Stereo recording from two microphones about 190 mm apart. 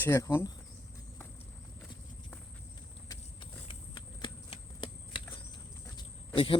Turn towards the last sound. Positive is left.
turn(degrees=25)  # may be behind; listen again after turning